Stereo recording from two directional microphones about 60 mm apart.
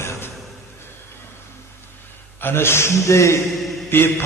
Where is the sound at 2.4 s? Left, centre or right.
Left.